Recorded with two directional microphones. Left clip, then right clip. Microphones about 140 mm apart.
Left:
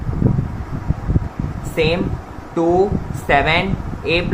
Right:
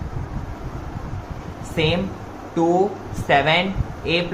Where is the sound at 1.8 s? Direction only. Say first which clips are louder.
Left 4 dB; 45° left (ahead or behind).